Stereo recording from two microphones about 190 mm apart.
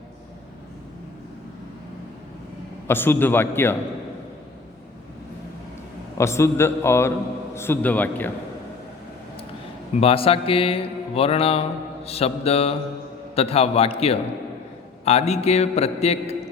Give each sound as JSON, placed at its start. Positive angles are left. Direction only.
{"t": 2.8, "sound": "a man's voice", "side_deg": 10}
{"t": 6.1, "sound": "a man's voice", "side_deg": 15}
{"t": 9.9, "sound": "speech", "side_deg": 30}
{"t": 12.0, "sound": "mantra", "side_deg": 30}